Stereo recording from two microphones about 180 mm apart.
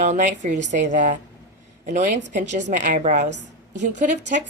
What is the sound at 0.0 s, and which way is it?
A woman's voice, 40° right (ahead or behind).